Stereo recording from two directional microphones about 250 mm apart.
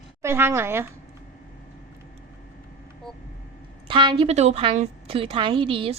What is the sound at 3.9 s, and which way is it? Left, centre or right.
A woman's voice, centre.